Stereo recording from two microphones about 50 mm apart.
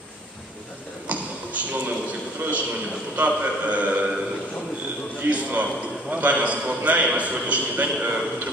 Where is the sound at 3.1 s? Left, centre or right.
Right.